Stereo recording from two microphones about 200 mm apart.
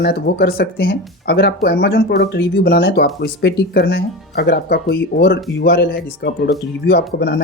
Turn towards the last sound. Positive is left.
turn(degrees=55)  # may be behind; listen again after turning